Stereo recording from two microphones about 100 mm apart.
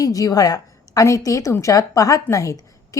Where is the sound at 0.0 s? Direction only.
35° left (ahead or behind).